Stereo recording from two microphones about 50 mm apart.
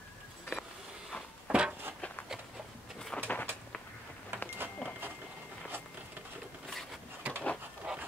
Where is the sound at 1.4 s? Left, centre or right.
Centre.